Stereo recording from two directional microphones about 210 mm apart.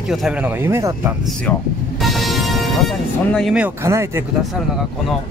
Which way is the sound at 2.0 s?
Centre (ahead or behind).